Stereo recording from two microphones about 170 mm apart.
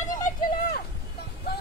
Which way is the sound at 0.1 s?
50° left (ahead or behind).